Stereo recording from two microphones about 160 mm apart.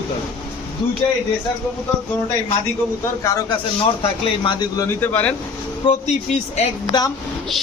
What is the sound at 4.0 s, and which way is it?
Speech, 30° left (ahead or behind).